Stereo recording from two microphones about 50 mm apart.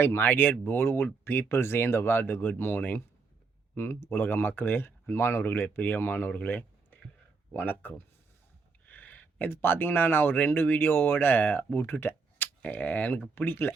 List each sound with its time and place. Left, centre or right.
0.0 s speech: left
8.9 s a sound: left
9.5 s speech: left
12.6 s speech: left
13.4 s speech: left